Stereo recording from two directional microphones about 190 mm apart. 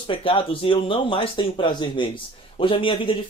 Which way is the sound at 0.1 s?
30° left (ahead or behind).